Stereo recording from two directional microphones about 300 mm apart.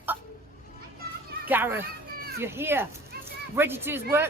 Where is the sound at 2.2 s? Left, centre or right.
Right.